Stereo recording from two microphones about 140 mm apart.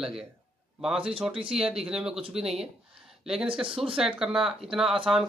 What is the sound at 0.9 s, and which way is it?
Speech, 40° right (ahead or behind).